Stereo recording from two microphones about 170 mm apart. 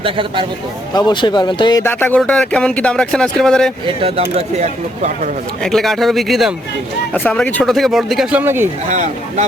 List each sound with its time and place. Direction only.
0.0 s speech: 30° right (ahead or behind)
0.9 s speech: 25° left (ahead or behind)
1.8 s speech: 10° left (ahead or behind)
3.8 s speech: 35° right (ahead or behind)
5.6 s speech: centre (ahead or behind)
8.9 s speech: 40° right (ahead or behind)